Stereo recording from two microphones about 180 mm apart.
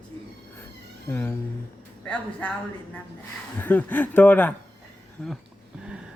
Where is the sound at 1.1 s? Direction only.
10° left (ahead or behind).